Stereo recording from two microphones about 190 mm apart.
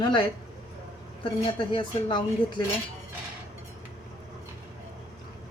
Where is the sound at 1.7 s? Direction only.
25° left (ahead or behind).